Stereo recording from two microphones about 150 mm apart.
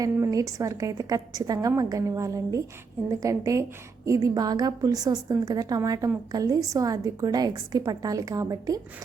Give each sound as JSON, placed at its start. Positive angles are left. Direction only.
{"t": 0.0, "sound": "a woman's voice", "side_deg": -25}